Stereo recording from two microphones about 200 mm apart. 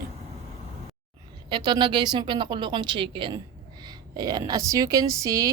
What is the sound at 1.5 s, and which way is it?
A woman's voice, 20° right (ahead or behind).